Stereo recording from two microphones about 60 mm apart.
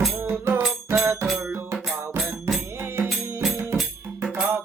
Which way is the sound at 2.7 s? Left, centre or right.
Right.